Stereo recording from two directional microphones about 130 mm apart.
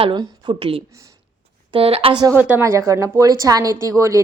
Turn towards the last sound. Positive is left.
turn(degrees=-25)  # may be behind; listen again after turning